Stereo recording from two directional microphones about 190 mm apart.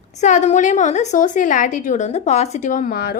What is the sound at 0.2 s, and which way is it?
A woman's voice, 40° left (ahead or behind).